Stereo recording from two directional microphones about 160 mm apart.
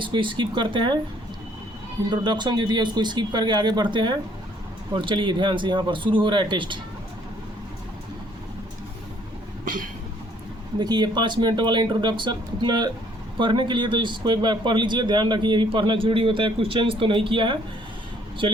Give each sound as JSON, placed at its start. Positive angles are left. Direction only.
{"t": 0.0, "sound": "a man's voice", "side_deg": -30}
{"t": 2.0, "sound": "speech", "side_deg": -30}
{"t": 10.8, "sound": "a man's voice", "side_deg": -25}